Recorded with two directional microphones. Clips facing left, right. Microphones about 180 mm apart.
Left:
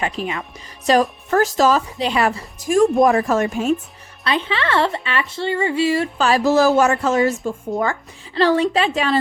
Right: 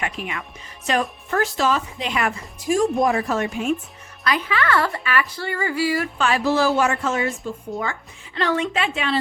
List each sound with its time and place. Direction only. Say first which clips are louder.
0.0 s a woman's voice: left 5 dB; 30° left (ahead or behind)
2.6 s a woman's voice: left 5 dB; 50° left (ahead or behind)
4.2 s speech: left 1 dB; 30° left (ahead or behind)
6.2 s a woman's voice: left 5 dB; 40° left (ahead or behind)
8.4 s a woman's voice: left 6 dB; 35° left (ahead or behind)